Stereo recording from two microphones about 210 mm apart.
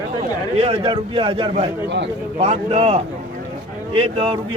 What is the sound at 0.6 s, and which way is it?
A man's voice, 25° right (ahead or behind).